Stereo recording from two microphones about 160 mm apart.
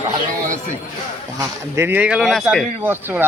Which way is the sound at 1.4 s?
15° right (ahead or behind).